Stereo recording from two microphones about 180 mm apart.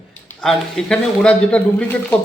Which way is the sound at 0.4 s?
5° left (ahead or behind).